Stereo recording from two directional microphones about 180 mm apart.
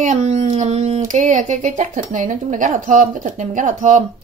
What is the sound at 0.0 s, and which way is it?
A woman's voice, 40° right (ahead or behind).